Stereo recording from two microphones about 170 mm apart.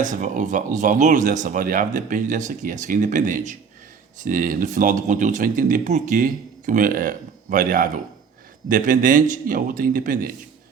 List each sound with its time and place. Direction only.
0.0 s speech: 50° right (ahead or behind)